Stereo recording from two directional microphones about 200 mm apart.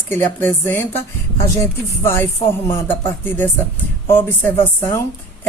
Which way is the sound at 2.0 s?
10° left (ahead or behind).